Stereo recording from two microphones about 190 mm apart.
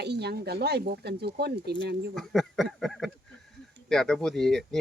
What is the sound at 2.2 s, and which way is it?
Speech, centre (ahead or behind).